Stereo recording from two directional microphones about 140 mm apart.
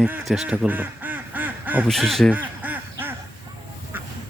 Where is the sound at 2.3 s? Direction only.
10° right (ahead or behind).